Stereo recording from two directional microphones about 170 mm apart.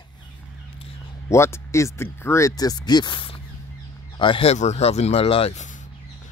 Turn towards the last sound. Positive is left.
turn(degrees=40)  # may be behind; listen again after turning